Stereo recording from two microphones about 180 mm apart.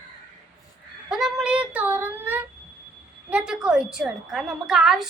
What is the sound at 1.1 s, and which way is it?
Child singing, 5° right (ahead or behind).